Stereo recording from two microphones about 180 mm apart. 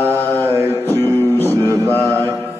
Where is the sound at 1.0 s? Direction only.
15° right (ahead or behind).